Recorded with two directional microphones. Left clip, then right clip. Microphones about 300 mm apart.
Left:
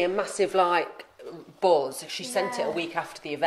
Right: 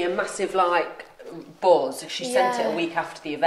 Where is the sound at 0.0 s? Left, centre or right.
Left.